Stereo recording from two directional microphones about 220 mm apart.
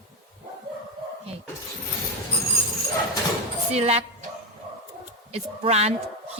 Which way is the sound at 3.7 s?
30° right (ahead or behind).